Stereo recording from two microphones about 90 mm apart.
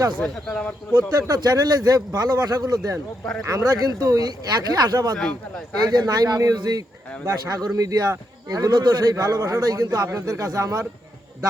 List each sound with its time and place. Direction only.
0.2 s speech: 5° left (ahead or behind)
1.3 s a man's voice: 45° right (ahead or behind)
5.1 s a man's voice: 10° left (ahead or behind)
5.8 s a man's voice: 50° right (ahead or behind)